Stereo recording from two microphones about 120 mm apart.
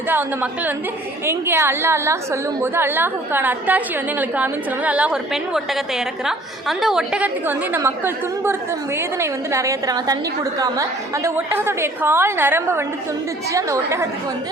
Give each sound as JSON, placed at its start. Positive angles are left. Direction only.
{"t": 0.1, "sound": "a woman's voice", "side_deg": -15}